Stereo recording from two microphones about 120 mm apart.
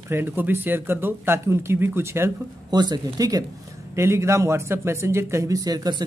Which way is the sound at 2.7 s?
35° right (ahead or behind).